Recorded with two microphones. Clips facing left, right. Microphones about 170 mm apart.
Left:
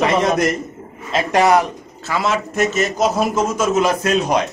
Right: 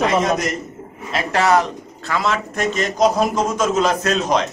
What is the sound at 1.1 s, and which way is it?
Speech, 20° left (ahead or behind).